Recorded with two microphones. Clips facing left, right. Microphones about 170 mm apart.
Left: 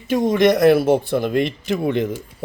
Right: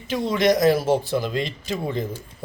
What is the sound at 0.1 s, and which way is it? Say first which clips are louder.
Speech: left 4 dB; 50° left (ahead or behind).